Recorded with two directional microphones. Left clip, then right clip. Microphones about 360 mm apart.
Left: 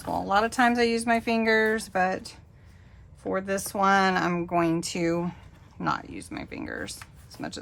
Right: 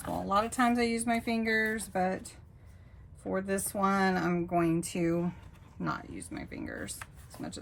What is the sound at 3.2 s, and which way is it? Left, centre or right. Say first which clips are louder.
Speech: left 5 dB; centre.